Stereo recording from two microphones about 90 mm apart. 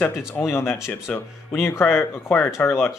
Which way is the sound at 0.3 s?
30° left (ahead or behind).